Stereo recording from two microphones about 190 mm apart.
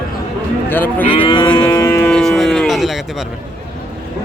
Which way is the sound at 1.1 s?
25° left (ahead or behind).